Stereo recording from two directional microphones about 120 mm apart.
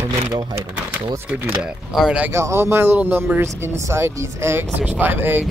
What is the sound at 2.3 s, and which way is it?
Speech, 20° right (ahead or behind).